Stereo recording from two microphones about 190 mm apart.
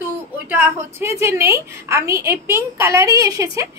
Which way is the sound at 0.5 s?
10° right (ahead or behind).